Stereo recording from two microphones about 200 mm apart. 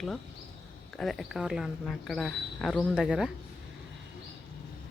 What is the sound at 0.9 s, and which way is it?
Speech, centre (ahead or behind).